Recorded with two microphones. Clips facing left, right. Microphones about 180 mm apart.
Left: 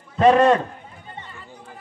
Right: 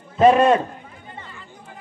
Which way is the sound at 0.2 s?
10° right (ahead or behind).